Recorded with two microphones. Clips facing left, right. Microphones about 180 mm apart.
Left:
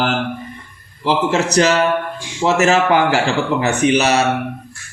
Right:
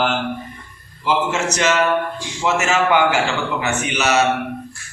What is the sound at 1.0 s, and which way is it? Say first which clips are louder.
Speech: left 3 dB; 35° left (ahead or behind).